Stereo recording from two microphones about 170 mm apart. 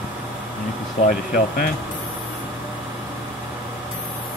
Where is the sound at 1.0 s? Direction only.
55° left (ahead or behind).